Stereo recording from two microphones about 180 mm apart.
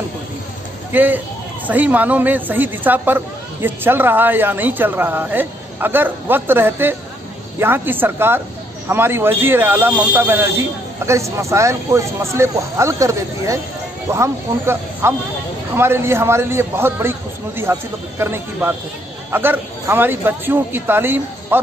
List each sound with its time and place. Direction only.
0.9 s speech: 10° right (ahead or behind)